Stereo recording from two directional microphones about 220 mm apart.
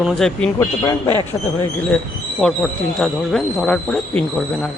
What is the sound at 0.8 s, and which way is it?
Speech, 15° left (ahead or behind).